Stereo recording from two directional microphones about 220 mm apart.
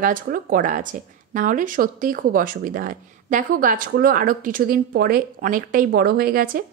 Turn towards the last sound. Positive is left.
turn(degrees=-40)  # may be behind; listen again after turning